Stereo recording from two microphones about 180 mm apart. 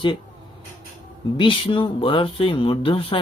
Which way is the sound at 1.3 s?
30° left (ahead or behind).